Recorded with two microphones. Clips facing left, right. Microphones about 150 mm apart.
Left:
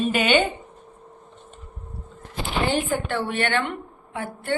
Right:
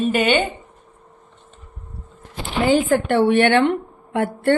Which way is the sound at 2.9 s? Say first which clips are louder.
Right 9 dB; 65° right (ahead or behind).